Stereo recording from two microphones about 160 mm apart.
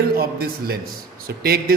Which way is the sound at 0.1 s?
70° right (ahead or behind).